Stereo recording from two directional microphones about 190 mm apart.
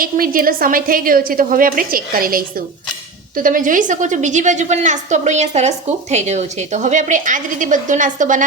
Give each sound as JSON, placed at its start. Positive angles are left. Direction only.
{"t": 0.0, "sound": "a woman's voice", "side_deg": -50}